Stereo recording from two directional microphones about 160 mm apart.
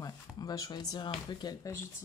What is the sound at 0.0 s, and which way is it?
Speech, 25° left (ahead or behind).